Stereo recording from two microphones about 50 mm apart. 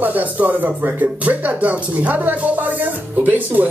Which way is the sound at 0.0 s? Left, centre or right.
Right.